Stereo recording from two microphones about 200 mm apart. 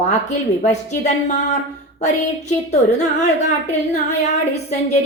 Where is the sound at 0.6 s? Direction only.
35° left (ahead or behind).